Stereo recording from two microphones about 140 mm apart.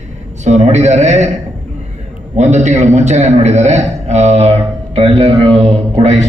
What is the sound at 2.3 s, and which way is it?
A man's voice, 55° right (ahead or behind).